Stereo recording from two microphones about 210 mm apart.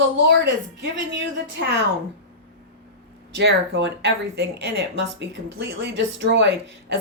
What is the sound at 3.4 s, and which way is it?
Speech, 55° right (ahead or behind).